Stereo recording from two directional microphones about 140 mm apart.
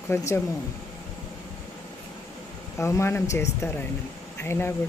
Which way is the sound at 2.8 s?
20° left (ahead or behind).